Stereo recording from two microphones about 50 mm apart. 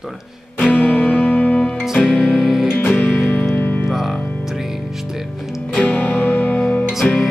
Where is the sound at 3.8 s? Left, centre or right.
Centre.